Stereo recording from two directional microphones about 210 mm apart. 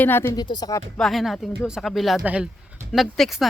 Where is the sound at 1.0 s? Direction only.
Centre (ahead or behind).